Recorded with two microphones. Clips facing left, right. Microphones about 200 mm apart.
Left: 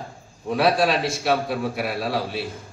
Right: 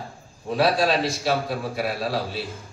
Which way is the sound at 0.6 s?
60° left (ahead or behind).